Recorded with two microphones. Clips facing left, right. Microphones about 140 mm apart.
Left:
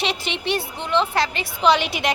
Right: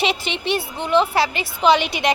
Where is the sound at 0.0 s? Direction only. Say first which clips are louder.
Right 3 dB; centre (ahead or behind).